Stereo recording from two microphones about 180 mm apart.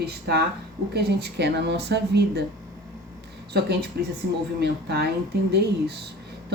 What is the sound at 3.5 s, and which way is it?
Speech, 65° right (ahead or behind).